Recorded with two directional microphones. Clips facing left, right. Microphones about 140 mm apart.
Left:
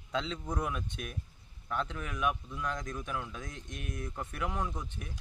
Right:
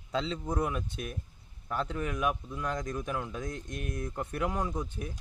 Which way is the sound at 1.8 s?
35° right (ahead or behind).